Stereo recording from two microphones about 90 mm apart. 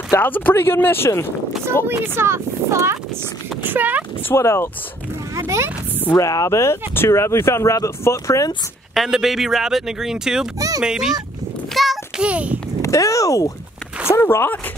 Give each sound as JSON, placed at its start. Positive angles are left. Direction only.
{"t": 0.1, "sound": "speech", "side_deg": 20}
{"t": 1.9, "sound": "speech", "side_deg": -30}
{"t": 3.7, "sound": "speech", "side_deg": -20}
{"t": 4.3, "sound": "speech", "side_deg": 30}
{"t": 5.3, "sound": "speech", "side_deg": -30}
{"t": 6.1, "sound": "speech", "side_deg": 40}
{"t": 8.9, "sound": "speech", "side_deg": -5}
{"t": 11.7, "sound": "child singing", "side_deg": 0}
{"t": 12.2, "sound": "speech", "side_deg": -15}
{"t": 12.8, "sound": "speech", "side_deg": 35}
{"t": 14.0, "sound": "speech", "side_deg": 30}